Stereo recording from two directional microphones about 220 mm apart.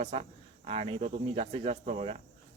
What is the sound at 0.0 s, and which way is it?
Speech, 25° right (ahead or behind).